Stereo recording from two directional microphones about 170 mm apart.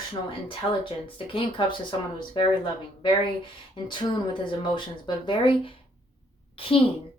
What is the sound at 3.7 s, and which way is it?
A woman's voice, 30° left (ahead or behind).